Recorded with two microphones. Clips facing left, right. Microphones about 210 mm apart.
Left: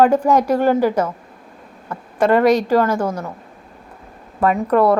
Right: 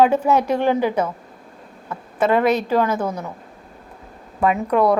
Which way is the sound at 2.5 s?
10° left (ahead or behind).